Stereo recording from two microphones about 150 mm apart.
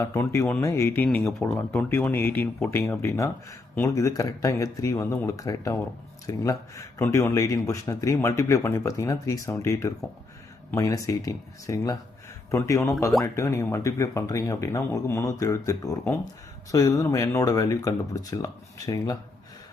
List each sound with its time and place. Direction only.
0.0 s speech: 20° left (ahead or behind)
1.0 s speech: 5° left (ahead or behind); by 19.1 s 25° left (ahead or behind)